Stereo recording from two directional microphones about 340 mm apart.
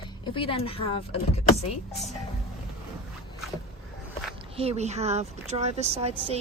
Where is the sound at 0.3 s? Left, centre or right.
Centre.